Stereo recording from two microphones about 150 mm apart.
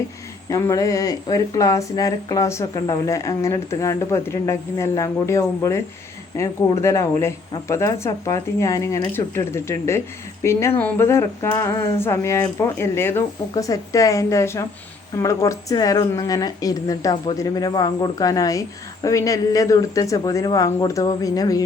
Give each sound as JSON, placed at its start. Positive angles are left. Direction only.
{"t": 0.4, "sound": "speech", "side_deg": 20}